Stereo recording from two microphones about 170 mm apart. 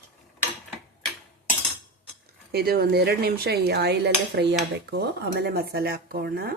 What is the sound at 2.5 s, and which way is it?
Dishes, 65° right (ahead or behind).